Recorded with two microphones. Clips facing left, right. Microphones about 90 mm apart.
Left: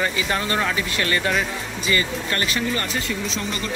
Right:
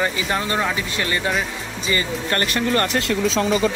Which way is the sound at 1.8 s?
30° right (ahead or behind).